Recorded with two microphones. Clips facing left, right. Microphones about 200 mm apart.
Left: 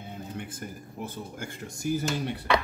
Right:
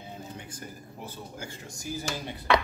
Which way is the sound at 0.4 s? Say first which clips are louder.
Left 5 dB; 55° left (ahead or behind).